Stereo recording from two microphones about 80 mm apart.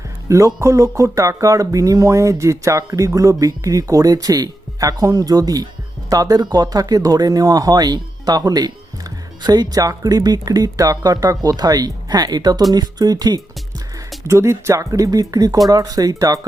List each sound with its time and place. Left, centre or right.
0.3 s speech: right
14.3 s speech: right